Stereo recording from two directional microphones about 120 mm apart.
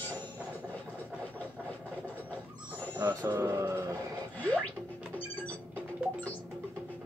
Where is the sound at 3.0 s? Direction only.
20° right (ahead or behind).